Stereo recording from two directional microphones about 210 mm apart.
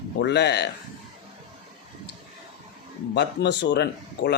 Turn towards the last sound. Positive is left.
turn(degrees=55)  # may be behind; listen again after turning